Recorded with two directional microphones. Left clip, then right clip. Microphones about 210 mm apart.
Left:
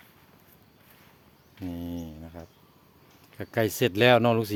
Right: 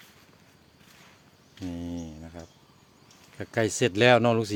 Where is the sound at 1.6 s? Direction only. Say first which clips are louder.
Even; 5° left (ahead or behind).